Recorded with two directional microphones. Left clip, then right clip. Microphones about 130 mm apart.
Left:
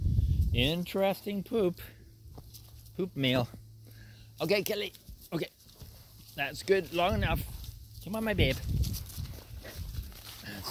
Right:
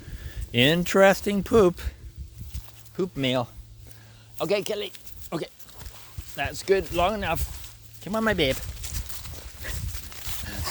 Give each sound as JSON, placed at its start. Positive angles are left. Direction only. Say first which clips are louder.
{"t": 0.5, "sound": "speech", "louder": "right 10 dB", "side_deg": -70}
{"t": 0.9, "sound": "speech", "louder": "right 12 dB", "side_deg": -90}
{"t": 3.0, "sound": "speech", "louder": "right 7 dB", "side_deg": -35}
{"t": 4.4, "sound": "speech", "louder": "right 4 dB", "side_deg": 15}
{"t": 5.3, "sound": "speech", "louder": "right 4 dB", "side_deg": -10}
{"t": 6.7, "sound": "speech", "louder": "right 5 dB", "side_deg": -5}
{"t": 8.0, "sound": "speech", "louder": "right 7 dB", "side_deg": -45}
{"t": 9.1, "sound": "livestock", "louder": "right 7 dB", "side_deg": -10}
{"t": 9.7, "sound": "a sound", "louder": "right 9 dB", "side_deg": -5}